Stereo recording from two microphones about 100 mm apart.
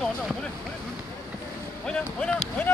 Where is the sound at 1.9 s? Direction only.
10° left (ahead or behind).